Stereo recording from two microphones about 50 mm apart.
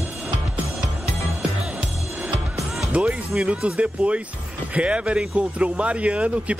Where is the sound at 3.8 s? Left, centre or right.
Centre.